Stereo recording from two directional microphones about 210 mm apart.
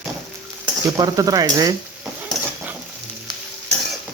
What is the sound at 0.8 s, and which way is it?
Speech, 15° right (ahead or behind).